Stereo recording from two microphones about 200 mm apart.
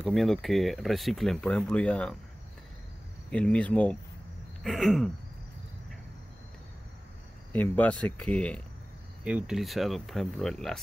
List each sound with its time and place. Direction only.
0.0 s speech: centre (ahead or behind)
3.3 s speech: 5° left (ahead or behind)
7.5 s speech: 10° left (ahead or behind)
9.2 s speech: 5° right (ahead or behind)